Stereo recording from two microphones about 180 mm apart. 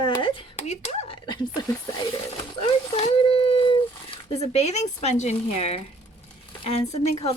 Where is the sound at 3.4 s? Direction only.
30° left (ahead or behind).